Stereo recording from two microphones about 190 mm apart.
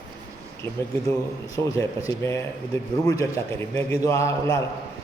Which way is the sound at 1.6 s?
15° left (ahead or behind).